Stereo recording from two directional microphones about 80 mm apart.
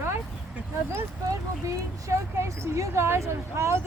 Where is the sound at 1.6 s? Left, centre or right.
Right.